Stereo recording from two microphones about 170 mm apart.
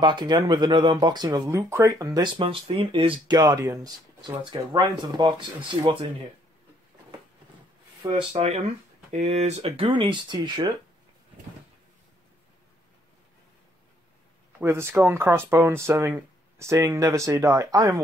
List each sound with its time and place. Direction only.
0.0 s speech: 25° right (ahead or behind)
8.0 s speech: 30° right (ahead or behind)
14.6 s speech: 15° right (ahead or behind)